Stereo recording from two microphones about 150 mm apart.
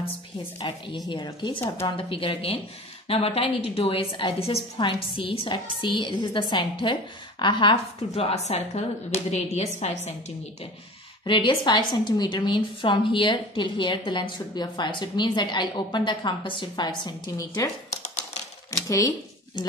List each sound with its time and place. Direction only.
0.6 s a woman's voice: 30° left (ahead or behind); by 10.1 s 50° left (ahead or behind)
11.2 s a woman's voice: 30° left (ahead or behind)
18.7 s speech: 20° left (ahead or behind)